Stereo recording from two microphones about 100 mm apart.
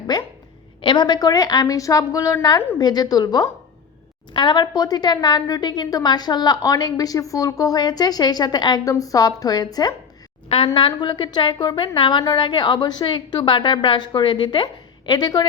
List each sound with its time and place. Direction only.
0.1 s a woman's voice: 45° left (ahead or behind)
10.8 s a woman's voice: 50° left (ahead or behind)
11.9 s a woman's voice: 55° left (ahead or behind)